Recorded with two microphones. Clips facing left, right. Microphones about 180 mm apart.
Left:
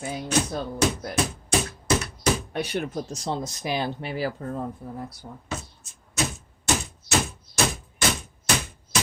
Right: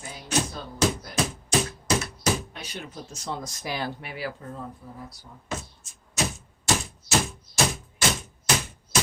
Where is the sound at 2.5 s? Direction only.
60° left (ahead or behind).